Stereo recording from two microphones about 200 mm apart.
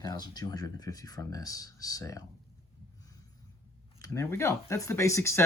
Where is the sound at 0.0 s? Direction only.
20° left (ahead or behind).